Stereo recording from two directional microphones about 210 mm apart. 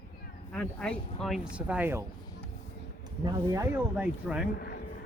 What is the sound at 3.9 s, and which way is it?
Speech, 5° right (ahead or behind).